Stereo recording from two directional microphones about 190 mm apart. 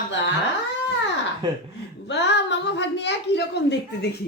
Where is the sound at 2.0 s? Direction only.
65° left (ahead or behind).